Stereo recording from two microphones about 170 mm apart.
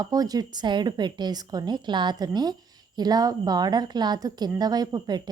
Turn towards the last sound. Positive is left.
turn(degrees=-25)  # may be behind; listen again after turning